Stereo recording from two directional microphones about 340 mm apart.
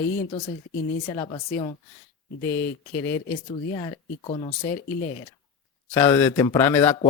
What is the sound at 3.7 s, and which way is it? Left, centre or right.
Speech, centre.